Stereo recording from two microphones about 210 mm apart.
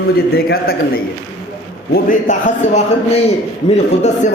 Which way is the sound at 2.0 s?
35° left (ahead or behind).